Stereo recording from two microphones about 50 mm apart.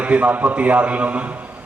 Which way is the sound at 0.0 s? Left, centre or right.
Right.